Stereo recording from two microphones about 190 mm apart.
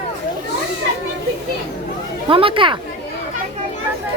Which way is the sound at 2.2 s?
25° right (ahead or behind).